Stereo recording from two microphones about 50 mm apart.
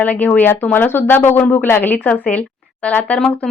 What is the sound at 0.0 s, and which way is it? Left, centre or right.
Speech, left.